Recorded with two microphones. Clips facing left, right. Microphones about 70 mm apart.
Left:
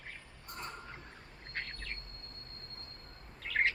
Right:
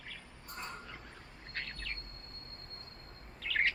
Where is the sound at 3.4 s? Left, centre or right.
Left.